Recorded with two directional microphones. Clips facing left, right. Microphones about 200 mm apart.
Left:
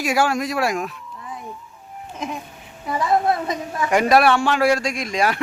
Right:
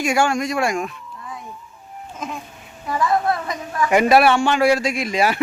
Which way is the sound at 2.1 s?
15° left (ahead or behind).